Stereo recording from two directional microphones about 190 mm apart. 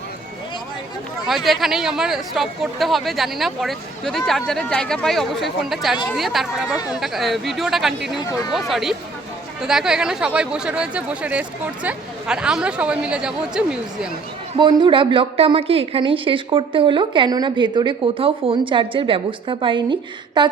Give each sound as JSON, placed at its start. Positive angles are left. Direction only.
{"t": 1.3, "sound": "speech", "side_deg": 0}
{"t": 8.2, "sound": "speech", "side_deg": 20}
{"t": 8.5, "sound": "speech", "side_deg": 0}
{"t": 14.5, "sound": "a woman's voice", "side_deg": -25}